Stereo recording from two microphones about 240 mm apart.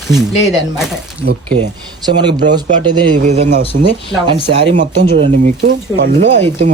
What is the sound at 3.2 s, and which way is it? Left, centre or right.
Speech, right.